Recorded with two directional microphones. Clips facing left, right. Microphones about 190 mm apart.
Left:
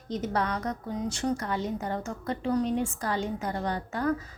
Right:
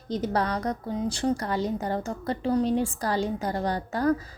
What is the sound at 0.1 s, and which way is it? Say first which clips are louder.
A woman's voice: right 3 dB; 35° right (ahead or behind).